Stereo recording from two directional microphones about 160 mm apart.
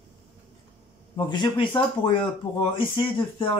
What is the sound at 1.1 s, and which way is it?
Speech, 30° left (ahead or behind).